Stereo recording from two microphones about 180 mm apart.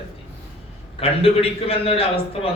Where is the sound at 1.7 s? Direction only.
30° left (ahead or behind).